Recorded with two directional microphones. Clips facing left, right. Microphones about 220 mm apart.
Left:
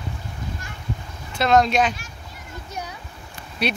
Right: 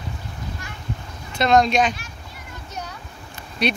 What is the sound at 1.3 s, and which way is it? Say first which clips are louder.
Speech: right 1 dB; 5° left (ahead or behind).